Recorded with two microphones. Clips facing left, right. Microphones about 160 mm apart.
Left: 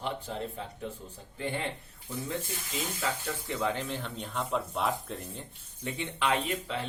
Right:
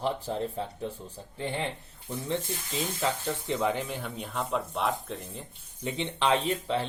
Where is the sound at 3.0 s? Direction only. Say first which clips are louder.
Right 4 dB; 25° right (ahead or behind); by 5.5 s centre (ahead or behind).